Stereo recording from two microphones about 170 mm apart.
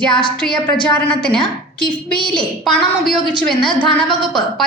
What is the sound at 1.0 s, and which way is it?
Speech, 5° left (ahead or behind).